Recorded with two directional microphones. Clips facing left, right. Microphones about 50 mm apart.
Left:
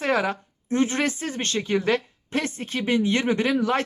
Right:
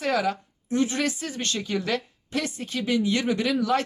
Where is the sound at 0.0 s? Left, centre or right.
Left.